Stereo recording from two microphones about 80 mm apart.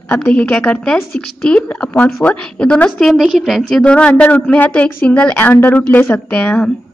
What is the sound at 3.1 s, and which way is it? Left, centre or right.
Speech, centre.